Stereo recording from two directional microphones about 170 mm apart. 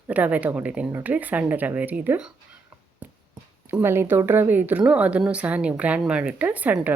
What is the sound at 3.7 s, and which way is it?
Speech, 15° right (ahead or behind).